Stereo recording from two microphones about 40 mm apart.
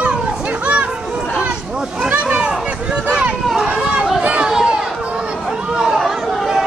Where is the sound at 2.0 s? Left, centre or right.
Right.